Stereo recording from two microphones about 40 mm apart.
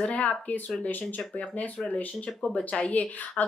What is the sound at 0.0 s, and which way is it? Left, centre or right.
Speech, left.